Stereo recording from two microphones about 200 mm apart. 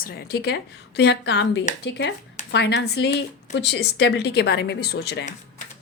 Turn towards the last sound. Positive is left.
turn(degrees=55)  # may be behind; listen again after turning